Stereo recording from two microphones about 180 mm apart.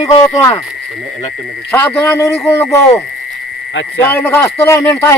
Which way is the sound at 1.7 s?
10° left (ahead or behind).